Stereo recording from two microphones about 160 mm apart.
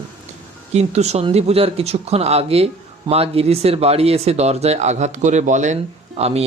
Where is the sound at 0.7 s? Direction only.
45° right (ahead or behind).